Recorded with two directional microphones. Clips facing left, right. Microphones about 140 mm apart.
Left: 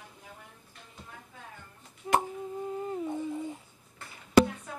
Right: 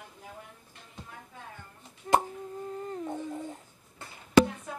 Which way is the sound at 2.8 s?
5° left (ahead or behind).